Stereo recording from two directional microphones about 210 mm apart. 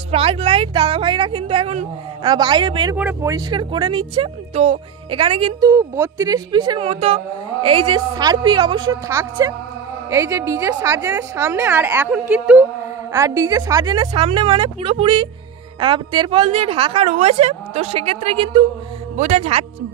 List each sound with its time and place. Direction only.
0.1 s speech: 25° right (ahead or behind)
3.0 s speech: 10° right (ahead or behind)
5.7 s a woman's voice: 15° right (ahead or behind); by 19.6 s 30° right (ahead or behind)